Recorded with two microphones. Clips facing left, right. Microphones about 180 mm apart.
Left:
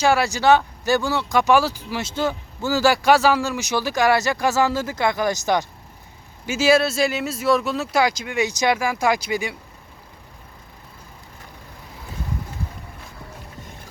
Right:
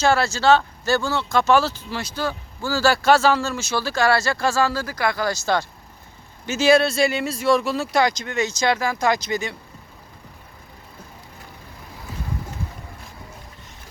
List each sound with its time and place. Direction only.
0.0 s speech: 15° left (ahead or behind)
6.4 s speech: 5° left (ahead or behind)